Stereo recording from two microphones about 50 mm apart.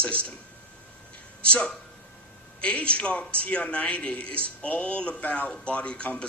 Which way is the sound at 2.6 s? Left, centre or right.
Left.